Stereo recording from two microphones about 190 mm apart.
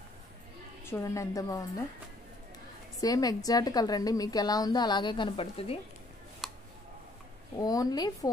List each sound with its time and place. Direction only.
0.8 s a woman's voice: 15° left (ahead or behind)
3.0 s a woman's voice: 20° left (ahead or behind)
6.4 s a sound: centre (ahead or behind)
7.6 s a woman's voice: 20° left (ahead or behind)